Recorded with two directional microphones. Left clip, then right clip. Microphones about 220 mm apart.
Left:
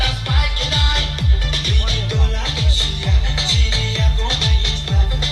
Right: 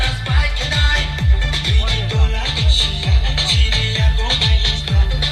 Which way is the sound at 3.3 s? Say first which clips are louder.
Right 1 dB; 15° right (ahead or behind).